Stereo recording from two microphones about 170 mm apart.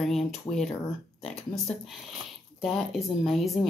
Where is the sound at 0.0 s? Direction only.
Centre (ahead or behind).